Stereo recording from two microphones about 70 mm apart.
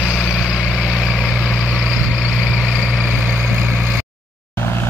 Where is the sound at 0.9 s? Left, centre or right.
Centre.